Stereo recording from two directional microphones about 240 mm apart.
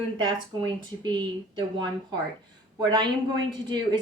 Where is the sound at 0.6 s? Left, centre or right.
Centre.